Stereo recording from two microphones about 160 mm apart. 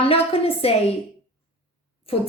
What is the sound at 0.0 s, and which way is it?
Speech, 35° left (ahead or behind).